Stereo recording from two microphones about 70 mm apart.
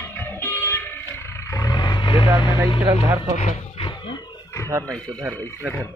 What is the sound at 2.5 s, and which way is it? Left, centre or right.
Speech, right.